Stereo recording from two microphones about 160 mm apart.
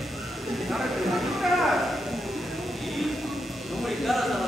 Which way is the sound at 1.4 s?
Centre (ahead or behind).